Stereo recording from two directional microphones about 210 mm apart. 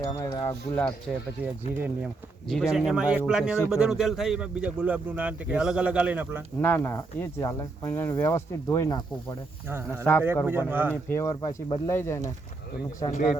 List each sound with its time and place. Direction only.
0.0 s speech: 15° left (ahead or behind)
2.5 s speech: centre (ahead or behind)
6.6 s speech: 10° left (ahead or behind)
10.0 s speech: 10° left (ahead or behind)
10.7 s speech: 10° right (ahead or behind)
11.1 s speech: 15° left (ahead or behind)
13.1 s speech: 35° left (ahead or behind)